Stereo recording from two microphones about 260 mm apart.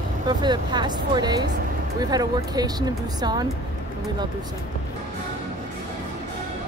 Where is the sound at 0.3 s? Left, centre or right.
Centre.